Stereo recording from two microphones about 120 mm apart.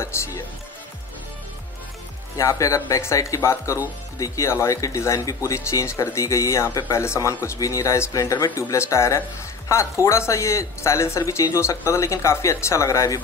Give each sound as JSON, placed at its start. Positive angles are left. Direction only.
{"t": 2.3, "sound": "speech", "side_deg": 25}